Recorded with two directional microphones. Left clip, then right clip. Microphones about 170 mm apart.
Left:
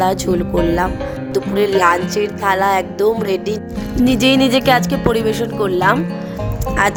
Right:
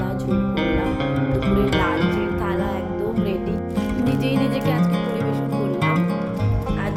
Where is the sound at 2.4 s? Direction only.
70° left (ahead or behind).